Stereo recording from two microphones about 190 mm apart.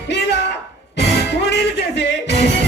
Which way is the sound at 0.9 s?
65° left (ahead or behind).